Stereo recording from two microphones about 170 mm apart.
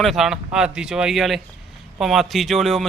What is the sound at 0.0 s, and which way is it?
A man's voice, centre (ahead or behind).